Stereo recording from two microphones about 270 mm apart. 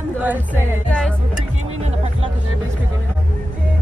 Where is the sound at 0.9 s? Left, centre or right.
Centre.